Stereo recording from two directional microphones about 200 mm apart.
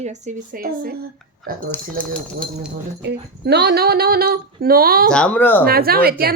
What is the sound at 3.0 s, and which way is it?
Speech, 55° right (ahead or behind).